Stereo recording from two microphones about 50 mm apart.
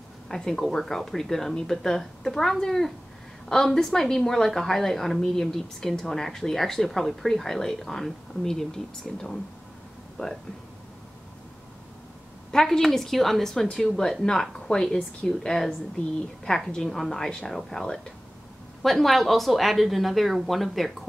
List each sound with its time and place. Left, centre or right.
0.3 s a woman's voice: centre
10.2 s speech: left
12.4 s a woman's voice: centre